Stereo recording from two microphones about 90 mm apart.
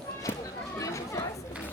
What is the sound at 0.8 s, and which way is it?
Chatter, 35° left (ahead or behind).